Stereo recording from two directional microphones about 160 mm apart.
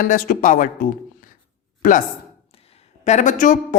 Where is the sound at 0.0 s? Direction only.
60° left (ahead or behind).